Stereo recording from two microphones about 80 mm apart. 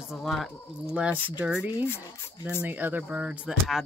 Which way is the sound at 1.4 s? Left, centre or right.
Centre.